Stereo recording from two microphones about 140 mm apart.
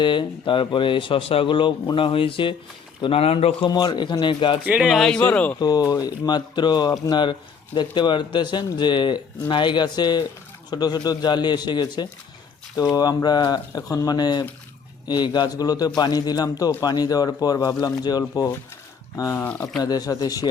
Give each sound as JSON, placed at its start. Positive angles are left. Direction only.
{"t": 0.0, "sound": "speech", "side_deg": 35}
{"t": 4.6, "sound": "speech", "side_deg": -10}
{"t": 5.5, "sound": "a man's voice", "side_deg": 30}
{"t": 19.8, "sound": "a man's voice", "side_deg": 30}